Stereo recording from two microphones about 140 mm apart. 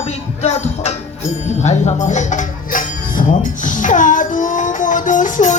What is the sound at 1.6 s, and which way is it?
Music, 60° left (ahead or behind).